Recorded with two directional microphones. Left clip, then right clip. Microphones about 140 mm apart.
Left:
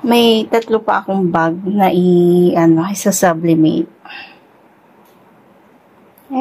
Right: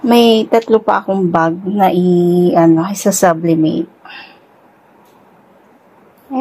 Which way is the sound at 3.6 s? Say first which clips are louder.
Left 1 dB; centre (ahead or behind).